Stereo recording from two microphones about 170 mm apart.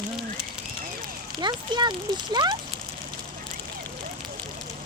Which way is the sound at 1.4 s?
25° right (ahead or behind).